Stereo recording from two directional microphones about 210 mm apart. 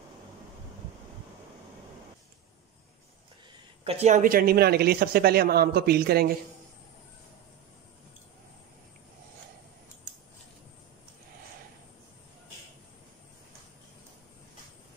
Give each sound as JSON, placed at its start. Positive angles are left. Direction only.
{"t": 3.8, "sound": "speech", "side_deg": -30}